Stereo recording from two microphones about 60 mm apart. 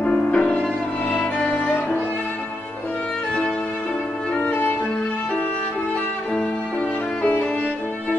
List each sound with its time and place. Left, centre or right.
0.1 s music: centre
1.2 s music: left
4.4 s violin: left